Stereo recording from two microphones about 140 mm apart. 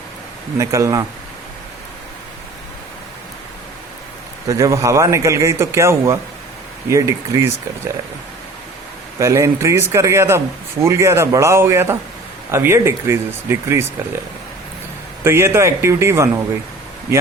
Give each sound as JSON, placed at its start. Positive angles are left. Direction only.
{"t": 0.6, "sound": "speech", "side_deg": -20}
{"t": 4.4, "sound": "speech", "side_deg": -20}
{"t": 9.1, "sound": "speech", "side_deg": -20}
{"t": 15.2, "sound": "speech", "side_deg": -20}